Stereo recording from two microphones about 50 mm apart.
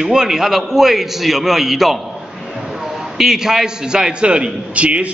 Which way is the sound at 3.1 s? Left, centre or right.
Centre.